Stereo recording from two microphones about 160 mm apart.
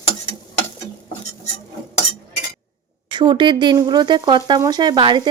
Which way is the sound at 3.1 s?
30° right (ahead or behind).